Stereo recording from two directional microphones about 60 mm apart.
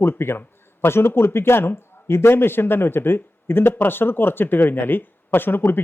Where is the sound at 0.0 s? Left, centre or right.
Left.